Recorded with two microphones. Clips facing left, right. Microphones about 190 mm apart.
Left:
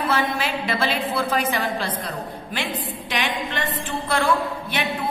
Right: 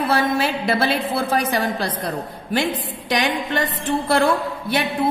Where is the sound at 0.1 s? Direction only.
40° right (ahead or behind).